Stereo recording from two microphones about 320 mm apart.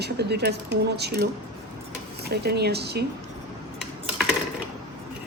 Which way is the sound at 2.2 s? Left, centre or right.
Right.